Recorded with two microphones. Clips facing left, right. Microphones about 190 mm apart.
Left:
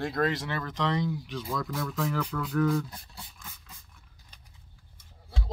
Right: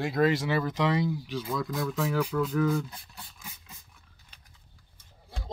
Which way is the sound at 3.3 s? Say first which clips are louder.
Right 1 dB; 15° right (ahead or behind).